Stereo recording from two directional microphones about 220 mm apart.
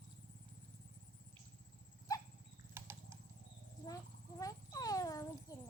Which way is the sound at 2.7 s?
10° right (ahead or behind).